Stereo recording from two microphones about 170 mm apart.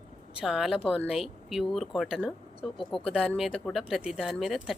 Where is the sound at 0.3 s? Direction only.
5° right (ahead or behind).